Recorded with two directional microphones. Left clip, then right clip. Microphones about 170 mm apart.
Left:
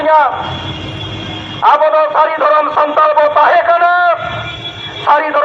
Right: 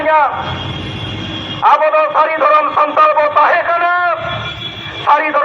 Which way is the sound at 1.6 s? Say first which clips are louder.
Left 1 dB; 25° left (ahead or behind).